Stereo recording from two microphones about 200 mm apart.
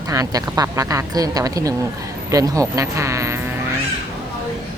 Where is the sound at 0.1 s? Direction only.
15° right (ahead or behind).